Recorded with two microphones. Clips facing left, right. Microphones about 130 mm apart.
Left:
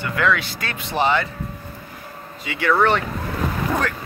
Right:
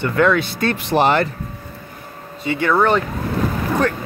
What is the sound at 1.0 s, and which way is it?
Speech, 50° right (ahead or behind).